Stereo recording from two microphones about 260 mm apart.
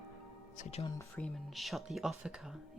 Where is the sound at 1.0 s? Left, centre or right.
Centre.